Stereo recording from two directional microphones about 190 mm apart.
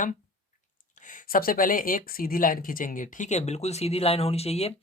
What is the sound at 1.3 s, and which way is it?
Speech, 50° left (ahead or behind).